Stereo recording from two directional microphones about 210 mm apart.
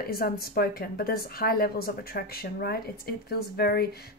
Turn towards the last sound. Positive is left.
turn(degrees=50)  # may be behind; listen again after turning